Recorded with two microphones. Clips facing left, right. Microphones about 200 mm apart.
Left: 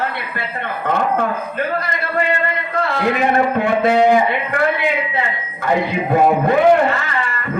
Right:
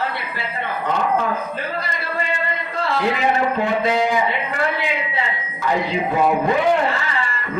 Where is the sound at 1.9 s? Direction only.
60° left (ahead or behind).